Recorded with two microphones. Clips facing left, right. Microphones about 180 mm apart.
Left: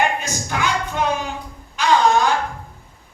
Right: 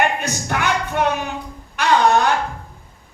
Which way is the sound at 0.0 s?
60° right (ahead or behind).